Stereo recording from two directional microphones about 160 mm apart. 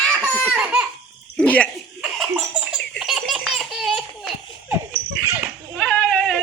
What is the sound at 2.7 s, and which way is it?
Laughter, 5° left (ahead or behind).